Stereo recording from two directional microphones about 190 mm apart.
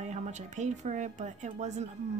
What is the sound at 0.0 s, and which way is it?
Speech, 35° right (ahead or behind).